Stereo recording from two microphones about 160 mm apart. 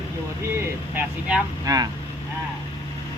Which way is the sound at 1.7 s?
20° right (ahead or behind).